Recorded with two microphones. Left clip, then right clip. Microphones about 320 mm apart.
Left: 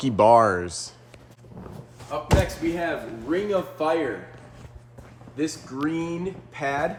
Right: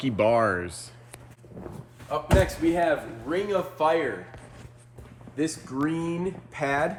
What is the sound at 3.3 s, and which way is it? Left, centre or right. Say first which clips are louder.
Speech: left 2 dB; right.